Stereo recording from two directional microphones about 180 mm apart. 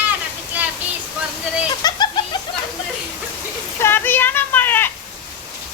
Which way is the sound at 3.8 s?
10° left (ahead or behind).